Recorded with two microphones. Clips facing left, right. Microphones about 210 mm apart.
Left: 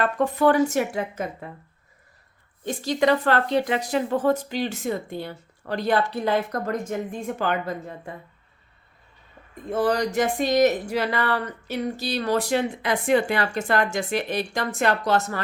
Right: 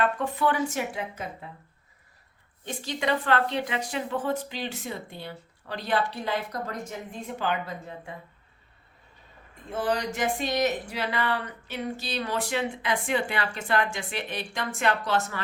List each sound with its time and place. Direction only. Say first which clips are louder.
0.0 s speech: left 5 dB; 40° left (ahead or behind)
2.6 s speech: left 7 dB; 40° left (ahead or behind)
9.6 s speech: left 6 dB; 40° left (ahead or behind)